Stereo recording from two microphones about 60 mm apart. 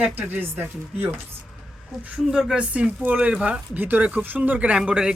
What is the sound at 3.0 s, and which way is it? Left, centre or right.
Speech, right.